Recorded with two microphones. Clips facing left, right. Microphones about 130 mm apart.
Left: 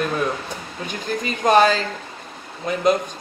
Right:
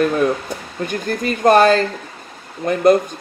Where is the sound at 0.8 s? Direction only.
50° right (ahead or behind).